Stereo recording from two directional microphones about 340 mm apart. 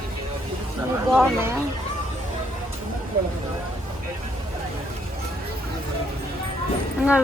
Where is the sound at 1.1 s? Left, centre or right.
Centre.